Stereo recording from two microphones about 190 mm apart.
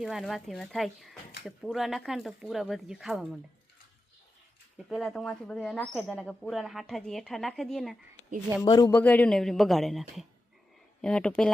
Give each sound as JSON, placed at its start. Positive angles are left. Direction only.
{"t": 0.0, "sound": "speech", "side_deg": 0}
{"t": 5.0, "sound": "speech", "side_deg": 5}
{"t": 8.6, "sound": "a man's voice", "side_deg": 20}
{"t": 8.9, "sound": "speech", "side_deg": 10}